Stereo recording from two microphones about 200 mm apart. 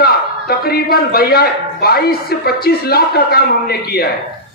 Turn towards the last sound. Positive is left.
turn(degrees=50)  # may be behind; listen again after turning